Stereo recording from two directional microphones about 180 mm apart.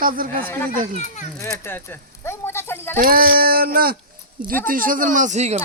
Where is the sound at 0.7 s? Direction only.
40° right (ahead or behind).